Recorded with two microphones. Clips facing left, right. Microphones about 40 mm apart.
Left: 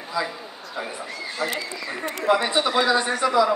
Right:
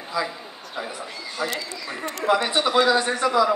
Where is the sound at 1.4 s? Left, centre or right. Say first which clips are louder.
Even; right.